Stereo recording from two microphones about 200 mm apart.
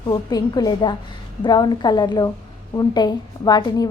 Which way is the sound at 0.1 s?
20° left (ahead or behind).